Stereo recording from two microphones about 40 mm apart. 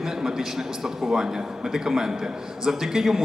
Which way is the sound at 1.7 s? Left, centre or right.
Centre.